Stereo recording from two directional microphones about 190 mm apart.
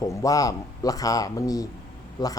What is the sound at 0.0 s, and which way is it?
Speech, 15° left (ahead or behind).